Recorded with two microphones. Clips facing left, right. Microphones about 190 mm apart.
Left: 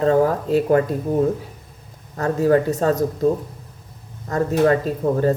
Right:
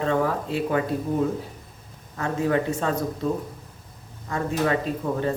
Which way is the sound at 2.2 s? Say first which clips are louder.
Left 6 dB; 40° left (ahead or behind).